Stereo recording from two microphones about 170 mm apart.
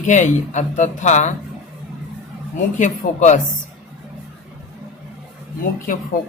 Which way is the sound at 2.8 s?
45° left (ahead or behind).